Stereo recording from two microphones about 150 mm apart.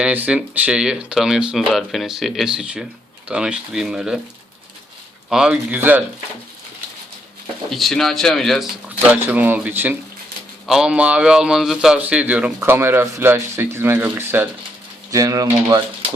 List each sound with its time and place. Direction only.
0.0 s speech: 10° right (ahead or behind)
5.3 s speech: 5° right (ahead or behind)
7.7 s speech: centre (ahead or behind)
9.1 s speech: 10° right (ahead or behind)